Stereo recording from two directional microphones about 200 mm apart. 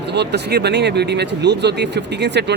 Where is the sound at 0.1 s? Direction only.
55° right (ahead or behind).